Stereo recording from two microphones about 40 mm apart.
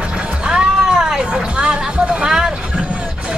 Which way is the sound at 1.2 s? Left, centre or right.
Right.